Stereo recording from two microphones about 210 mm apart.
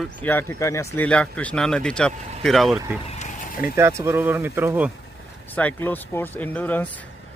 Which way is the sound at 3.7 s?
10° right (ahead or behind).